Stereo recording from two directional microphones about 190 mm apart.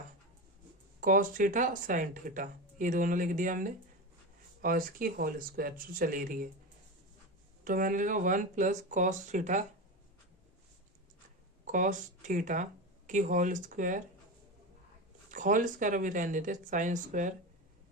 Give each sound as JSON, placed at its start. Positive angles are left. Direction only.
{"t": 1.0, "sound": "speech", "side_deg": -45}
{"t": 7.6, "sound": "speech", "side_deg": -45}
{"t": 11.6, "sound": "speech", "side_deg": -40}
{"t": 15.3, "sound": "speech", "side_deg": -45}